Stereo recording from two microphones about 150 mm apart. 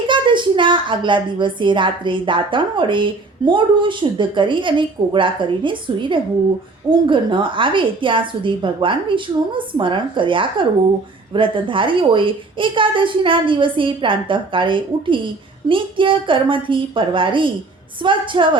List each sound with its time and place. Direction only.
0.1 s a woman's voice: 30° right (ahead or behind)